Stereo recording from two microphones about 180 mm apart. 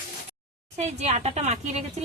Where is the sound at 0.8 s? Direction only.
40° right (ahead or behind).